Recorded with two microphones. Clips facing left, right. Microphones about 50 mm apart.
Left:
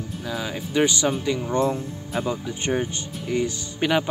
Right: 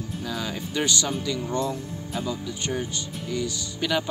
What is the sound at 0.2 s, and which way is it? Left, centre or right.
Speech, centre.